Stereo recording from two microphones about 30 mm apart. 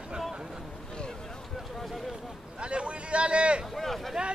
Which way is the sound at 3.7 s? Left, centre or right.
Centre.